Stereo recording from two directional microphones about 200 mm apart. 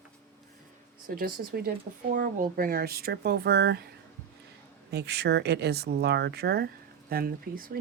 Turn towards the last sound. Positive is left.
turn(degrees=-45)  # may be behind; listen again after turning